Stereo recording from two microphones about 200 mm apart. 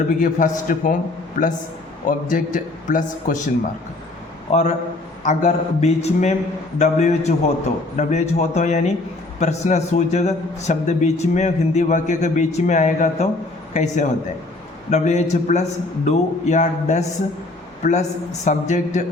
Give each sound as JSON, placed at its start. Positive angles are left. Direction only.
{"t": 0.2, "sound": "a man's voice", "side_deg": 40}
{"t": 2.0, "sound": "a man's voice", "side_deg": 40}